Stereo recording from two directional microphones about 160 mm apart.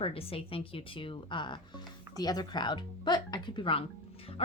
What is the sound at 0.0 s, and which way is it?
Speech, 35° left (ahead or behind).